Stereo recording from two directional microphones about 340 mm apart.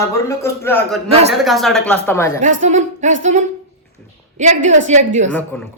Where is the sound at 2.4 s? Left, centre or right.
Right.